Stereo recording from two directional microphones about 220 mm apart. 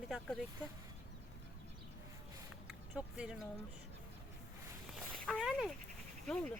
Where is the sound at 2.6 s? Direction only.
5° right (ahead or behind).